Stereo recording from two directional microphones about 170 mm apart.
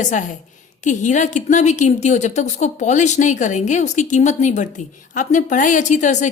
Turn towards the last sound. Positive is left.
turn(degrees=45)  # may be behind; listen again after turning